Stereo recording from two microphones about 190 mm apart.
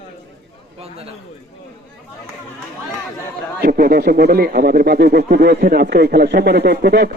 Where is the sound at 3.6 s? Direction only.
50° right (ahead or behind).